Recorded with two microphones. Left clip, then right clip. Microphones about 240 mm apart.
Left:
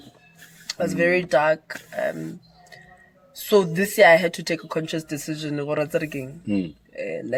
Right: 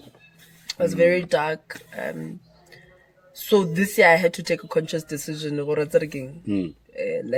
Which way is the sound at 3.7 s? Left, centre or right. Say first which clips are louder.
Left 2 dB; centre.